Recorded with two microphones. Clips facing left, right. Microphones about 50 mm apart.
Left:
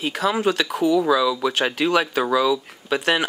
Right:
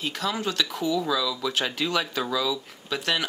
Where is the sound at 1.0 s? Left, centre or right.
Centre.